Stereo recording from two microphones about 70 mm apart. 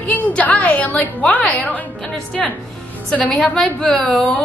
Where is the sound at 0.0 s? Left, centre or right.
Left.